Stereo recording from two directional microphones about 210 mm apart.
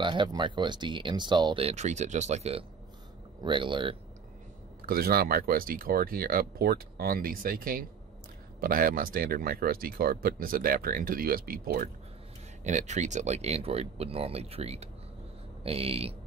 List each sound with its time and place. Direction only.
0.0 s speech: 20° right (ahead or behind)
4.8 s speech: 45° right (ahead or behind)
12.6 s speech: 35° right (ahead or behind)